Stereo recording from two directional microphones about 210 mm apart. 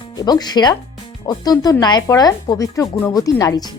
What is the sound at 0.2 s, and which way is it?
Speech, 20° left (ahead or behind).